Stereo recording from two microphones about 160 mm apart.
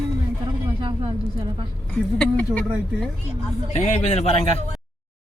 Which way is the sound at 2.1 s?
5° left (ahead or behind).